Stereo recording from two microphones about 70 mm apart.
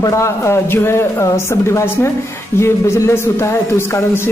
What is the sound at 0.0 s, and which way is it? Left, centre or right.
A woman's voice, left.